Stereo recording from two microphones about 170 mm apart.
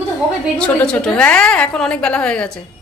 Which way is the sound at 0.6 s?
5° left (ahead or behind).